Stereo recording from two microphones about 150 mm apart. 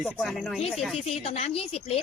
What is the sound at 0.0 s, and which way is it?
Speech, 5° left (ahead or behind).